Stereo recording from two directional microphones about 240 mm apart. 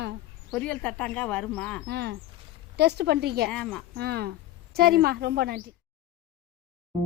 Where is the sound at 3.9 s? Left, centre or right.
Right.